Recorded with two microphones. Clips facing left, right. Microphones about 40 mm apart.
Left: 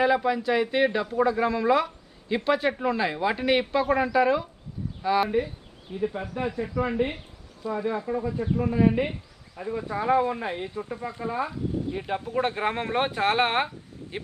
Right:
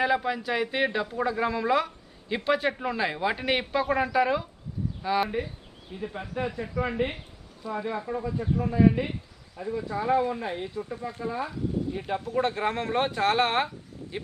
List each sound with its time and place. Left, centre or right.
0.0 s speech: centre
8.1 s a man's voice: centre